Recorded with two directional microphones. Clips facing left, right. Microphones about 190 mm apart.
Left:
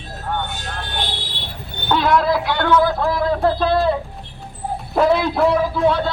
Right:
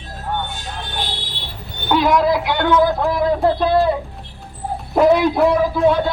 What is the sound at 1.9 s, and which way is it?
A man's voice, 15° right (ahead or behind).